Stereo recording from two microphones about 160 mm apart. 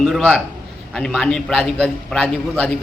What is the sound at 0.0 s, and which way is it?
A woman's voice, centre (ahead or behind).